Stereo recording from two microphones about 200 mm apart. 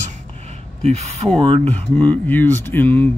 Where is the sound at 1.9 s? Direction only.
5° left (ahead or behind).